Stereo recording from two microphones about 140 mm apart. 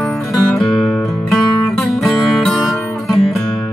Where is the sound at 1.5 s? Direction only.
20° left (ahead or behind).